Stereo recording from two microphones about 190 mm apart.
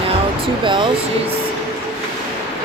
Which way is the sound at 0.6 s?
25° right (ahead or behind).